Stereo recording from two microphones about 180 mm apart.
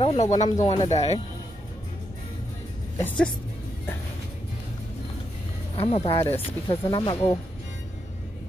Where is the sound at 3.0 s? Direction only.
10° left (ahead or behind).